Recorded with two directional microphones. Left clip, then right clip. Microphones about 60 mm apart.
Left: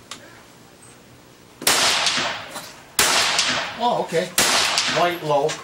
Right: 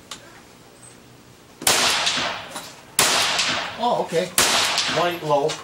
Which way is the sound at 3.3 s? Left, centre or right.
Left.